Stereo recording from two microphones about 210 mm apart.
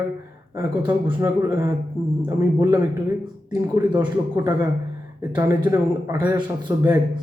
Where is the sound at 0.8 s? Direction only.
25° right (ahead or behind).